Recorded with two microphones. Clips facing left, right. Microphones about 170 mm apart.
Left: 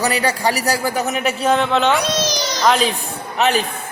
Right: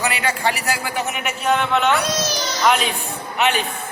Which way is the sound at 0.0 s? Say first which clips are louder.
Left 3 dB; 40° left (ahead or behind).